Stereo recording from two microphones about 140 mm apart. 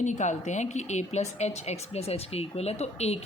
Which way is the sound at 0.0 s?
60° left (ahead or behind).